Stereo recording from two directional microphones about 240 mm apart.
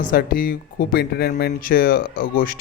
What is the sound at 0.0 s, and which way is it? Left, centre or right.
Speech, left.